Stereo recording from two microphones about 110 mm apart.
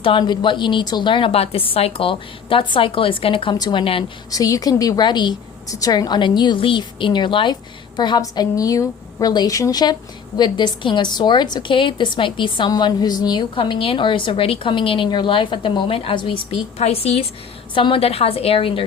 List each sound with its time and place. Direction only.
0.0 s a woman's voice: 45° left (ahead or behind)
4.3 s a woman's voice: 35° left (ahead or behind)
13.6 s a woman's voice: 55° left (ahead or behind)
16.7 s a woman's voice: 70° left (ahead or behind)
17.7 s a woman's voice: 50° left (ahead or behind)